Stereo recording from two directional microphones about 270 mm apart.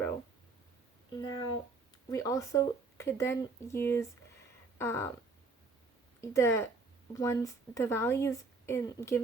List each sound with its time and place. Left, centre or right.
1.2 s speech: centre
6.3 s speech: centre